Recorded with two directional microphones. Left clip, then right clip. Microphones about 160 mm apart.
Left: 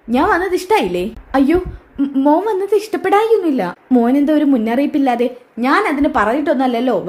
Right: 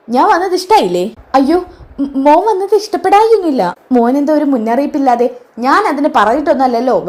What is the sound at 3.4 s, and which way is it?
A woman's voice, 5° right (ahead or behind).